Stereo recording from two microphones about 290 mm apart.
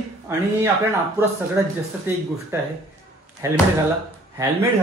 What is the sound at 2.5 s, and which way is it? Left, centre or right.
A man's voice, centre.